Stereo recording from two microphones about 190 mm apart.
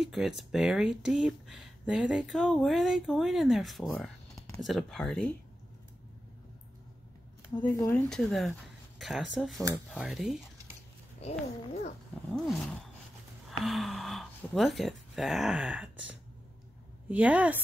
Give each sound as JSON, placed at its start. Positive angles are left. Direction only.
{"t": 0.0, "sound": "speech", "side_deg": -5}
{"t": 7.7, "sound": "speech", "side_deg": 10}
{"t": 11.2, "sound": "a child's voice", "side_deg": 35}
{"t": 12.3, "sound": "a woman's voice", "side_deg": 5}